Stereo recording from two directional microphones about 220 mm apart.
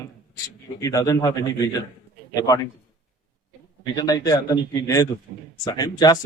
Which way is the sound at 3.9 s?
15° left (ahead or behind).